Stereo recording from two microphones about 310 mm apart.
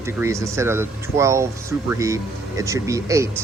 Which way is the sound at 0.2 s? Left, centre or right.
Centre.